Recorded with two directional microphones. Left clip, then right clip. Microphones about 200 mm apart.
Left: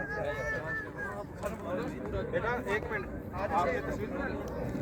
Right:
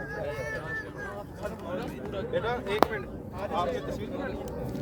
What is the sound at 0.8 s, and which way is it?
Vehicle, 45° right (ahead or behind).